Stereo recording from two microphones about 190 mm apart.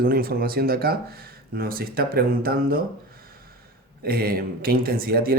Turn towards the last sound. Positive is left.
turn(degrees=-50)  # may be behind; listen again after turning